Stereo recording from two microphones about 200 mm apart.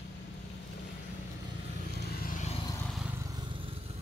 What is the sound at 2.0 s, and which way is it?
Vehicle, 45° left (ahead or behind).